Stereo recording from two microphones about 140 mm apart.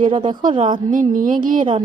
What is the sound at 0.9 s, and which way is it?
Speech, 70° right (ahead or behind).